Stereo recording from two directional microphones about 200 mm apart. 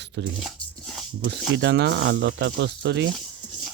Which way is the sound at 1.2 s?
60° right (ahead or behind).